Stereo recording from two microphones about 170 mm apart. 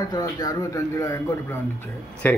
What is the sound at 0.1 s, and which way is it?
Speech, 20° left (ahead or behind).